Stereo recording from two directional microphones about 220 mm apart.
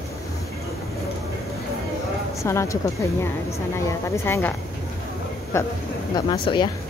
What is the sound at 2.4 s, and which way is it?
A woman's voice, 15° left (ahead or behind).